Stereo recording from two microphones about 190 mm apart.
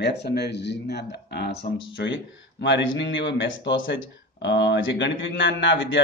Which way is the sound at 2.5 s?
65° left (ahead or behind).